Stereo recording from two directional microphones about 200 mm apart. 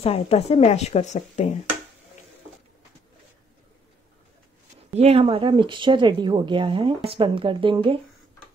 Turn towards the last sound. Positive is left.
turn(degrees=-25)  # may be behind; listen again after turning